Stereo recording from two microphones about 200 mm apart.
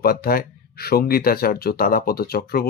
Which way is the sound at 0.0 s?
50° left (ahead or behind).